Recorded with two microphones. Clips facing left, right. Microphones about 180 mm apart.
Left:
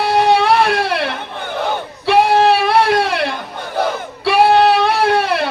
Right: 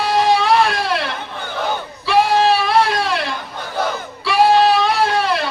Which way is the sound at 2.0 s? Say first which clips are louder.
Left 3 dB; 60° left (ahead or behind).